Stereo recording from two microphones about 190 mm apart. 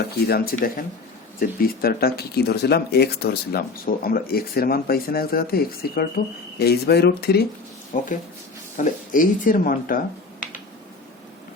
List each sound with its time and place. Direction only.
0.3 s speech: 55° left (ahead or behind)
7.9 s speech: 40° left (ahead or behind)